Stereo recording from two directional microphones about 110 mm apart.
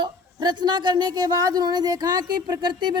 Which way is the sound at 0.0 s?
45° right (ahead or behind).